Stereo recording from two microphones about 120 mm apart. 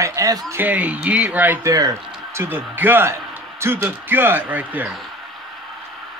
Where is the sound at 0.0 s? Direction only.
30° right (ahead or behind).